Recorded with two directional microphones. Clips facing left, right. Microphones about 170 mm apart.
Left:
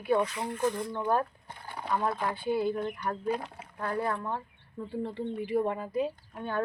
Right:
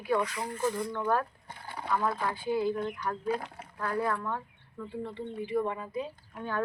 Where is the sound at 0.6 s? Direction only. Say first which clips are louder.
Left 1 dB; 20° left (ahead or behind).